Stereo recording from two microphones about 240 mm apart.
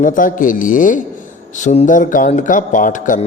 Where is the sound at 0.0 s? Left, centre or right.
Left.